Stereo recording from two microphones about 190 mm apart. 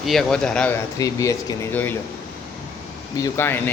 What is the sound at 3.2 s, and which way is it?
Speech, 10° left (ahead or behind).